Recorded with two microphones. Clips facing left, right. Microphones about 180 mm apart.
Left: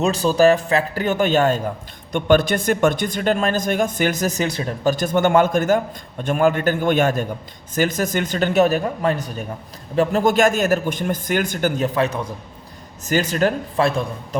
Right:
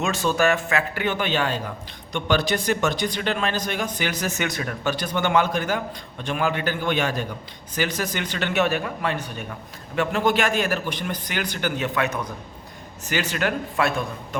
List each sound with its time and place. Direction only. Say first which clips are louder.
0.0 s a man's voice: left 6 dB; 35° left (ahead or behind)